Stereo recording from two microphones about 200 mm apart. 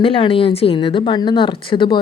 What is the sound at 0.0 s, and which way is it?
Speech, 25° left (ahead or behind).